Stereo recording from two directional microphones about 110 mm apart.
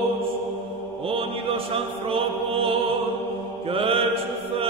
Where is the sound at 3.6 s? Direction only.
55° right (ahead or behind).